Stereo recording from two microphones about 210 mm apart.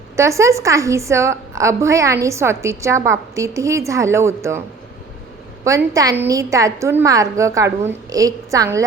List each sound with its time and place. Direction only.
0.2 s a woman's voice: 15° right (ahead or behind)
5.6 s a woman's voice: 15° right (ahead or behind)